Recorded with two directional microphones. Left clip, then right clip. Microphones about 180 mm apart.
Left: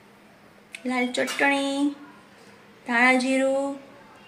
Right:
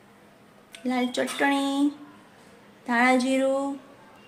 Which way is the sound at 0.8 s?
15° right (ahead or behind).